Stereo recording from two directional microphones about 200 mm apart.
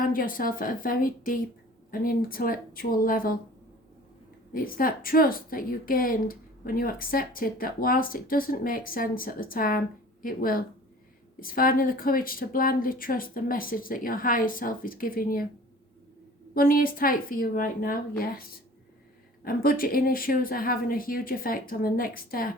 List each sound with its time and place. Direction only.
0.0 s a woman's voice: 45° left (ahead or behind)
4.5 s a woman's voice: 45° left (ahead or behind)
16.6 s a woman's voice: 45° left (ahead or behind)
19.5 s a woman's voice: 45° left (ahead or behind)